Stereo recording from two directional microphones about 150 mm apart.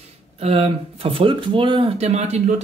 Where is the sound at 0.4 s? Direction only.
40° right (ahead or behind).